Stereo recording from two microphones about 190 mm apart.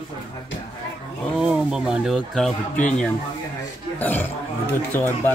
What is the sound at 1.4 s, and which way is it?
Speech, 5° right (ahead or behind).